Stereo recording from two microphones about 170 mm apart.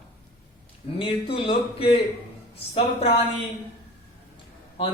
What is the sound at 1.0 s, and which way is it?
A man's voice, 30° left (ahead or behind).